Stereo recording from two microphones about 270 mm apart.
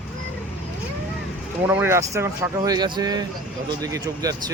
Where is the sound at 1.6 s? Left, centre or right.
Centre.